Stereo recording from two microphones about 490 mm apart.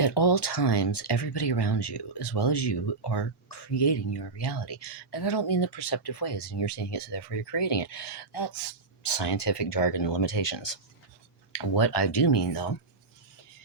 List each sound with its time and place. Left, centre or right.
0.0 s speech: left